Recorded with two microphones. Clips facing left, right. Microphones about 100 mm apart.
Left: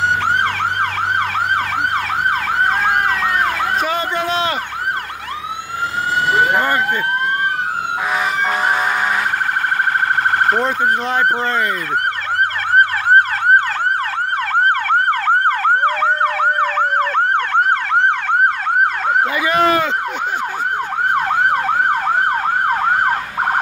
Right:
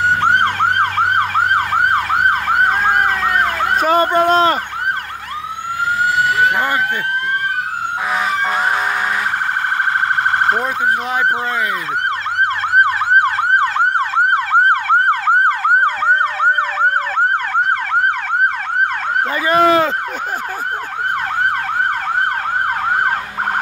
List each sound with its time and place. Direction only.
3.7 s a man's voice: 45° right (ahead or behind)
5.9 s emergency vehicle: 25° left (ahead or behind)
14.1 s emergency vehicle: 15° right (ahead or behind)
19.4 s a sound: 35° right (ahead or behind)